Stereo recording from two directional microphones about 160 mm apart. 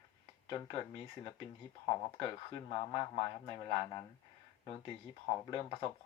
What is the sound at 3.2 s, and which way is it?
Speech, 30° left (ahead or behind).